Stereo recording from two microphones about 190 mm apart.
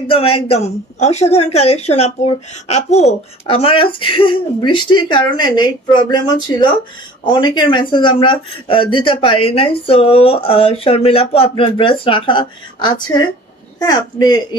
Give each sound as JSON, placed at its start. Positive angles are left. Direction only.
{"t": 0.1, "sound": "a woman's voice", "side_deg": 30}